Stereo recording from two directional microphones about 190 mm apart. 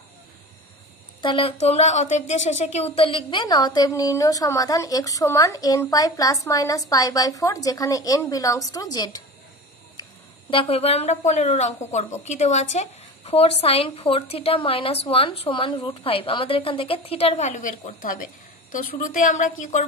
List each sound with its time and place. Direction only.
1.2 s speech: 30° left (ahead or behind)
10.0 s a sound: 20° left (ahead or behind)
10.5 s a woman's voice: 30° left (ahead or behind)